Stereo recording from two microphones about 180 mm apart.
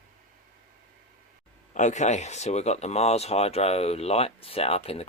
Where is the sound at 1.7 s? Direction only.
40° left (ahead or behind).